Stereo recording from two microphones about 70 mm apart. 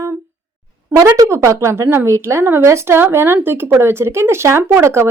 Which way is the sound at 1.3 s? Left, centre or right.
Right.